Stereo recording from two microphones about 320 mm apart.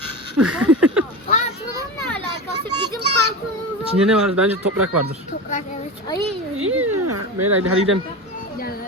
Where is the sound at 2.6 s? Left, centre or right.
Centre.